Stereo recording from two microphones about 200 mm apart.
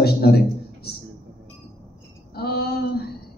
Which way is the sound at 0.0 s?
50° left (ahead or behind).